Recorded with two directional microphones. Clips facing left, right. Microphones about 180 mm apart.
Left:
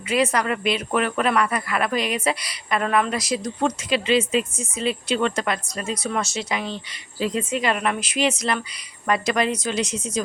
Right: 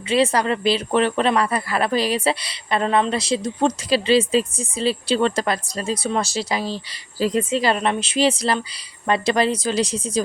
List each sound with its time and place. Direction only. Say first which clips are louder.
0.1 s a woman's voice: right 3 dB; 30° right (ahead or behind)